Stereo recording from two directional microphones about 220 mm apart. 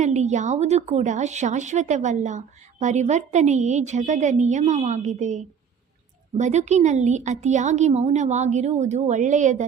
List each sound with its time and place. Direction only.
0.0 s a woman's voice: 30° right (ahead or behind)